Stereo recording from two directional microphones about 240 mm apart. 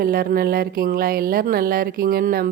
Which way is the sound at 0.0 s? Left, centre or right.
Right.